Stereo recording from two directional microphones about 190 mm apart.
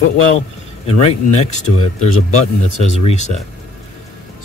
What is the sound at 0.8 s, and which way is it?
Speech, 30° left (ahead or behind).